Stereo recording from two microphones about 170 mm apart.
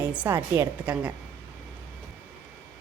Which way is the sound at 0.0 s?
10° right (ahead or behind).